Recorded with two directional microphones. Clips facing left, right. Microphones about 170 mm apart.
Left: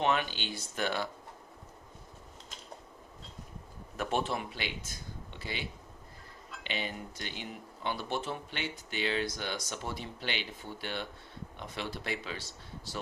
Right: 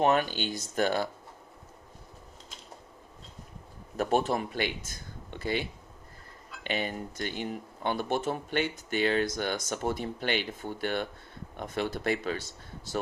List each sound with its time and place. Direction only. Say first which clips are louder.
0.0 s speech: right 5 dB; 45° right (ahead or behind)
3.9 s speech: right 6 dB; 40° right (ahead or behind)
6.7 s speech: right 6 dB; 50° right (ahead or behind)